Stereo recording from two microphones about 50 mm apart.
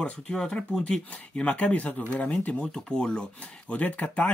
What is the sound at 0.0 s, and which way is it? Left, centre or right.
Speech, centre.